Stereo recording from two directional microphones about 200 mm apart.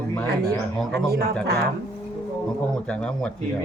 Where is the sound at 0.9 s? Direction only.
50° right (ahead or behind).